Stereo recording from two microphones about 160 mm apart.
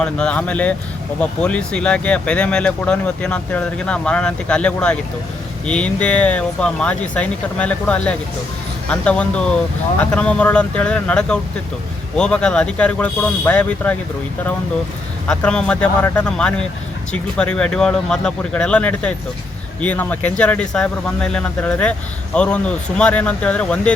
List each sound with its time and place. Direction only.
0.0 s speech: 5° left (ahead or behind)
15.3 s speech: 5° left (ahead or behind)